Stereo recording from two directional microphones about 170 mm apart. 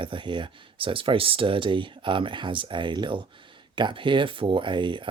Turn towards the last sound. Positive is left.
turn(degrees=-30)  # may be behind; listen again after turning